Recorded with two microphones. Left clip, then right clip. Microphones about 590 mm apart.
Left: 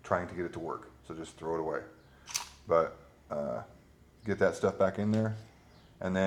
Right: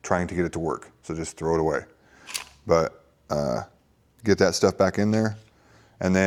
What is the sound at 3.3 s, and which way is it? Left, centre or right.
Speech, right.